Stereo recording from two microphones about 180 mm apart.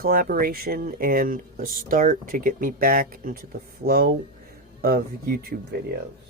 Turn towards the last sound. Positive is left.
turn(degrees=-55)  # may be behind; listen again after turning